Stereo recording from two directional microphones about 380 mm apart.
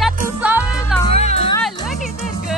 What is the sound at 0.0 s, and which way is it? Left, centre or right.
Music, centre.